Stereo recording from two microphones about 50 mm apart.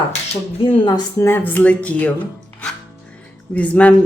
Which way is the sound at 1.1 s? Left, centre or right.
Left.